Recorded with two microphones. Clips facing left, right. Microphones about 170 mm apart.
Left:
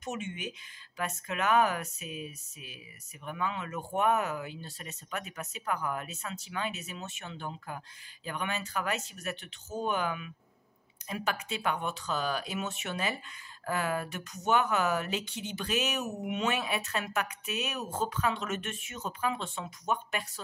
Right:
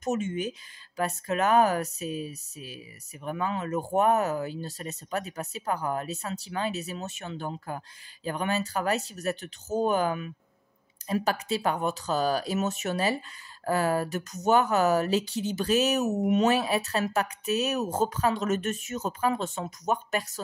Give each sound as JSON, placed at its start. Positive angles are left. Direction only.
{"t": 0.0, "sound": "speech", "side_deg": -40}